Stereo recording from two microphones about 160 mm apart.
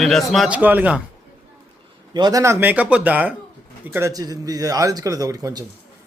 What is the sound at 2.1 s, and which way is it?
A man's voice, 25° right (ahead or behind).